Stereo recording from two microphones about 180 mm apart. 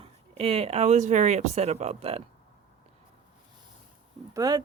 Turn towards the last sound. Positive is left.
turn(degrees=-20)  # may be behind; listen again after turning